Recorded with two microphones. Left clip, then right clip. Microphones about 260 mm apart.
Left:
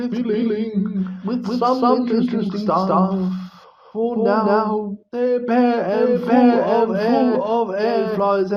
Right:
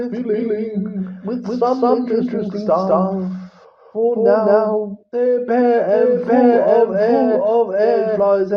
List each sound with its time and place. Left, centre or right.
0.0 s speech: left